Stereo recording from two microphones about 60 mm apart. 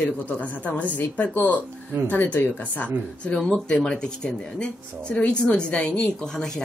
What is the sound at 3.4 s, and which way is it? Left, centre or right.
Speech, centre.